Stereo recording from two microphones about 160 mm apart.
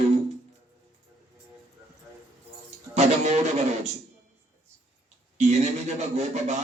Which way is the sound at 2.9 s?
45° right (ahead or behind).